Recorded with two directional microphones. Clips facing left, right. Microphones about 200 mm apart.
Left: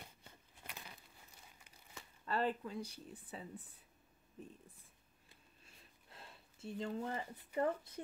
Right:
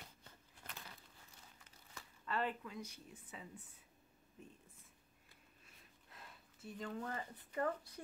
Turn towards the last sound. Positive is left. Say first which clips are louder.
# left 3 dB
turn(degrees=25)  # may be behind; listen again after turning